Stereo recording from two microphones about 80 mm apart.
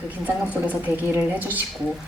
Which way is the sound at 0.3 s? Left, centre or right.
Centre.